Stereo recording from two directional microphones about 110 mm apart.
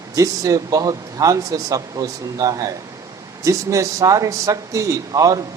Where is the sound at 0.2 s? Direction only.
30° right (ahead or behind).